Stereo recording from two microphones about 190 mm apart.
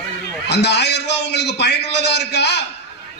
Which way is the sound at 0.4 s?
65° left (ahead or behind).